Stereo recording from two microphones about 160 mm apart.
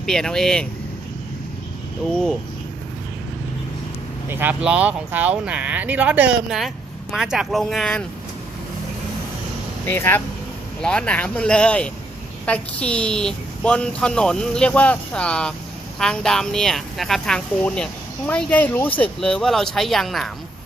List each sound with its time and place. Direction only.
0.0 s a woman's voice: 5° left (ahead or behind)
2.0 s a woman's voice: centre (ahead or behind)
4.3 s a woman's voice: 10° right (ahead or behind)
9.8 s a woman's voice: 10° left (ahead or behind)